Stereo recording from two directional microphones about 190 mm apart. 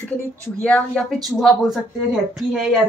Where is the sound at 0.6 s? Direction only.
5° left (ahead or behind).